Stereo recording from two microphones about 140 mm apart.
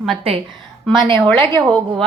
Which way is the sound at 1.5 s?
35° right (ahead or behind).